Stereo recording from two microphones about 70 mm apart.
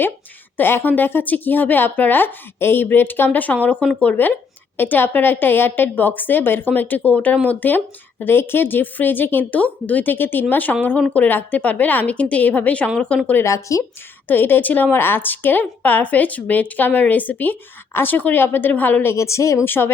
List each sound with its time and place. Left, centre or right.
0.5 s a woman's voice: left
13.4 s speech: left
14.3 s a woman's voice: left
19.1 s speech: left
19.6 s speech: left